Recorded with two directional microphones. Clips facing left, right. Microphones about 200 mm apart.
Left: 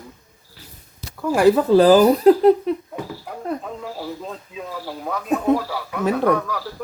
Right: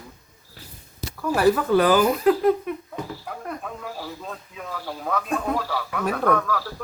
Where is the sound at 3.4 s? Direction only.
20° left (ahead or behind).